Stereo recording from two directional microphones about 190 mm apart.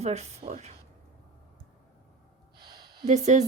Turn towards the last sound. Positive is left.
turn(degrees=-35)  # may be behind; listen again after turning